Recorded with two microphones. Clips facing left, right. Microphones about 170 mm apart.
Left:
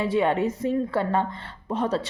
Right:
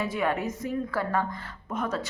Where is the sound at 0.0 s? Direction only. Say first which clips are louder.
Left 5 dB; 30° left (ahead or behind).